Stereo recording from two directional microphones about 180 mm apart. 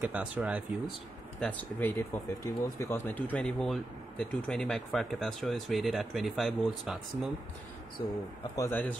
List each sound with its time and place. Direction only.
0.0 s speech: 10° right (ahead or behind)
1.4 s speech: 10° left (ahead or behind)
8.5 s a man's voice: 10° left (ahead or behind)